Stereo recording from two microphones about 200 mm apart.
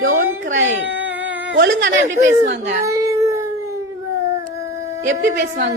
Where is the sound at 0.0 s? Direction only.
90° right.